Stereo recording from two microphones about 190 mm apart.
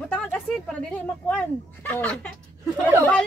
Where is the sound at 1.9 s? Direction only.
10° left (ahead or behind).